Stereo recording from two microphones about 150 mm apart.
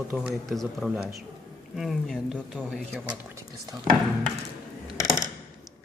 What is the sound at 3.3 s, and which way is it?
Speech, 20° right (ahead or behind).